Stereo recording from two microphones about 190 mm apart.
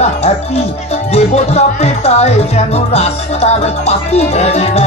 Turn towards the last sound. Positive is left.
turn(degrees=35)  # may be behind; listen again after turning